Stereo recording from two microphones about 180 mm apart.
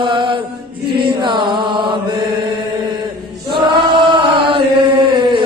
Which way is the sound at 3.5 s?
25° right (ahead or behind).